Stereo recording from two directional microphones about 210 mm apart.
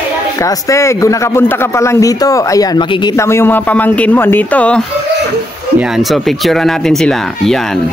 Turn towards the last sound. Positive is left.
turn(degrees=0)  # may be behind; listen again after turning